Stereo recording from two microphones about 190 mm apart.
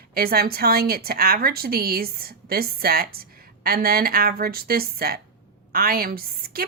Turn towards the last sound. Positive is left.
turn(degrees=-50)  # may be behind; listen again after turning